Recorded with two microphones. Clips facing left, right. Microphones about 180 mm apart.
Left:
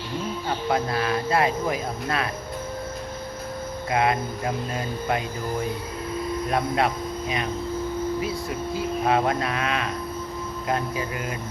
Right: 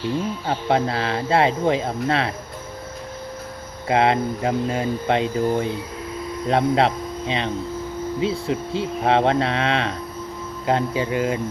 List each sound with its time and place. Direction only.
0.4 s speech: 25° right (ahead or behind)
3.8 s speech: 25° right (ahead or behind)